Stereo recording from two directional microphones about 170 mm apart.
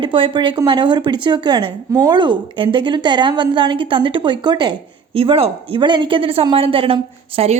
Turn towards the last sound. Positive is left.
turn(degrees=-35)  # may be behind; listen again after turning